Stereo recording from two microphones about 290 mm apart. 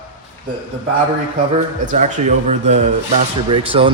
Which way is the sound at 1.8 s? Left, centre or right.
Right.